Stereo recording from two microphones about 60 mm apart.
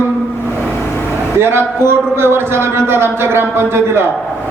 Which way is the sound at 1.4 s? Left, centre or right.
Right.